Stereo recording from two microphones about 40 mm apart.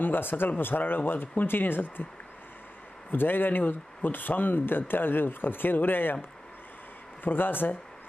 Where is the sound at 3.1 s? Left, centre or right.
Left.